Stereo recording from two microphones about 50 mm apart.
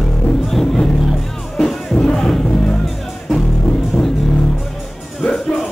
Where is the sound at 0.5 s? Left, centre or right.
Centre.